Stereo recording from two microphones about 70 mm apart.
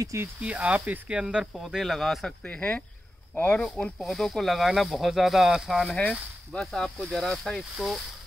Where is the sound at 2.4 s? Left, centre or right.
Centre.